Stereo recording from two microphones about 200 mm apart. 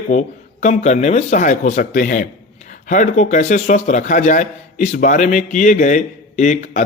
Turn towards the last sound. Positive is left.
turn(degrees=40)  # may be behind; listen again after turning